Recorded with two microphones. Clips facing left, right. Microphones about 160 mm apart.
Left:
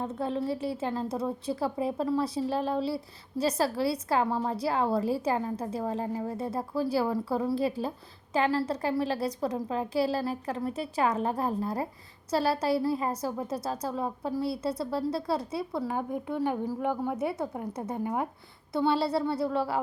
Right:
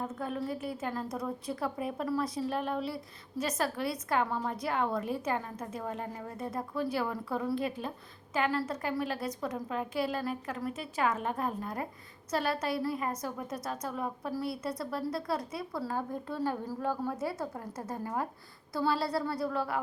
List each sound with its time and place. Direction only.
0.0 s a woman's voice: 30° left (ahead or behind)
15.8 s a woman's voice: 15° left (ahead or behind)